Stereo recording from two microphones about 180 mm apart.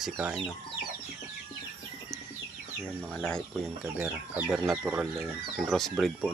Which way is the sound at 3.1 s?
5° left (ahead or behind).